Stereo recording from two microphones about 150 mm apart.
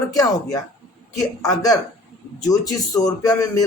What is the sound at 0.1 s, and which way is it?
A man's voice, 25° left (ahead or behind).